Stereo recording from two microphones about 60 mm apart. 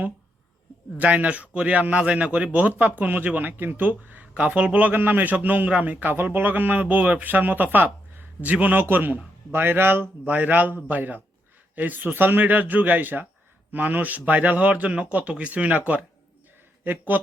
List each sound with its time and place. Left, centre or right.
0.9 s a man's voice: right